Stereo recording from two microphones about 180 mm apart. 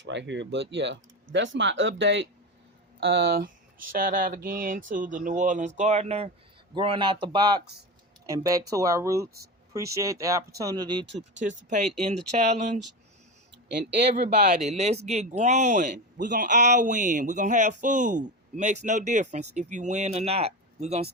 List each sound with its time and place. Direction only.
0.0 s speech: 75° right (ahead or behind)
3.0 s speech: 70° right (ahead or behind); by 11.0 s 25° right (ahead or behind)
11.0 s speech: 80° right
11.3 s speech: 45° right (ahead or behind)
14.2 s speech: 45° right (ahead or behind)